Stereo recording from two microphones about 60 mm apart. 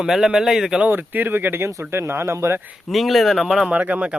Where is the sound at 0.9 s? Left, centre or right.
Right.